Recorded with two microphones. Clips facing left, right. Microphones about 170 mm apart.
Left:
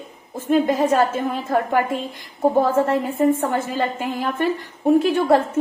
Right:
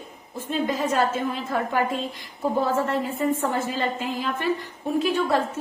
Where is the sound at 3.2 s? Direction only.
55° left (ahead or behind).